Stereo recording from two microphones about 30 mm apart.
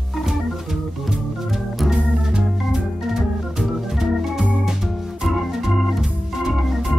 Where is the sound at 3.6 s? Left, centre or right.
Centre.